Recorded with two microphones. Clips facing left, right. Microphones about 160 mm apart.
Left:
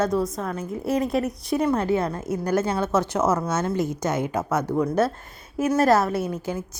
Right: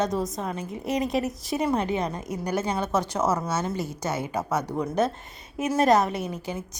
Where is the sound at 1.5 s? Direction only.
15° right (ahead or behind).